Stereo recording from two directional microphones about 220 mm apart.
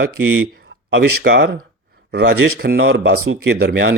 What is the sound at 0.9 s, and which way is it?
Speech, 55° right (ahead or behind).